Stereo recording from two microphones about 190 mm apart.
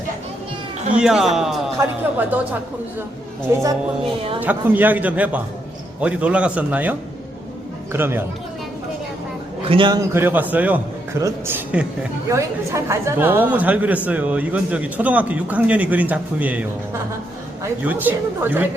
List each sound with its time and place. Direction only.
0.9 s a man's voice: centre (ahead or behind)
7.9 s a man's voice: 10° right (ahead or behind)
9.6 s a man's voice: 25° right (ahead or behind); by 18.7 s 10° right (ahead or behind)